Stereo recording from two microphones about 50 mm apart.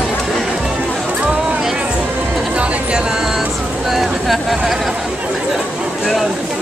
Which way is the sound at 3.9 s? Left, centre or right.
Centre.